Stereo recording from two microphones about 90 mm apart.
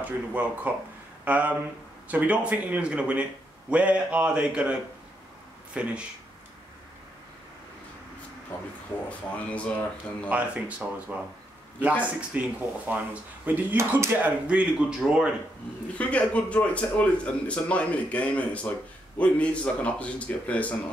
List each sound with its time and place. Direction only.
0.3 s speech: 20° right (ahead or behind)
5.7 s speech: 15° right (ahead or behind)
9.3 s a man's voice: 15° left (ahead or behind)
10.3 s speech: 15° right (ahead or behind)
14.1 s speech: 15° right (ahead or behind)
16.0 s a man's voice: 15° left (ahead or behind)